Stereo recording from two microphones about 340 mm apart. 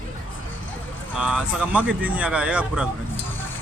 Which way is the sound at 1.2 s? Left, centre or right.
Centre.